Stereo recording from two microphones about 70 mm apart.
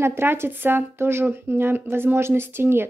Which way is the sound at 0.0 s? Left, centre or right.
Right.